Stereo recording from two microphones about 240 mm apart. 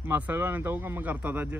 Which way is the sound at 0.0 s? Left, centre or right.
Centre.